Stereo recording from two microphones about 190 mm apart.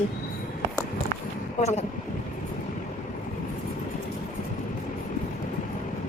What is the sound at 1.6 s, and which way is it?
Speech, 35° left (ahead or behind).